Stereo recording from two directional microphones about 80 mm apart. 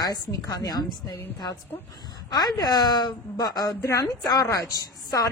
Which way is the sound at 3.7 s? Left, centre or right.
Left.